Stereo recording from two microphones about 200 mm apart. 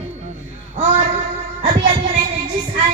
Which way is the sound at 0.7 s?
35° right (ahead or behind).